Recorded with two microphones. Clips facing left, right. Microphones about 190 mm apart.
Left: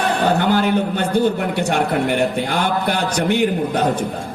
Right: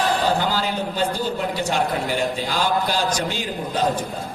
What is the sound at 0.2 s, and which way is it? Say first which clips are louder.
A man's voice: left 5 dB; 60° left (ahead or behind).